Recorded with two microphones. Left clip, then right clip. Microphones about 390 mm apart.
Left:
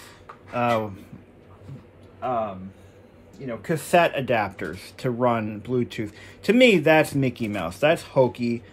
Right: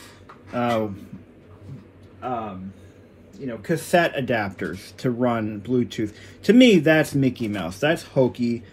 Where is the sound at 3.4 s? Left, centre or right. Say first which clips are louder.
Right 2 dB; left.